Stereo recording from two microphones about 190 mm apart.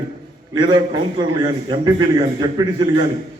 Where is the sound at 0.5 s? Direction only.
25° right (ahead or behind).